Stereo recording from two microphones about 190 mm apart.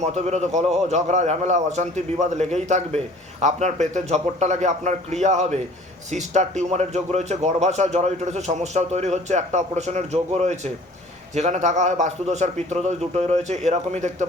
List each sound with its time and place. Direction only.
0.0 s a man's voice: 35° right (ahead or behind)